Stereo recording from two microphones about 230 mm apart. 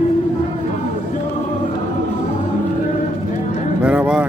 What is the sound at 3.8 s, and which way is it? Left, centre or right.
Speech, centre.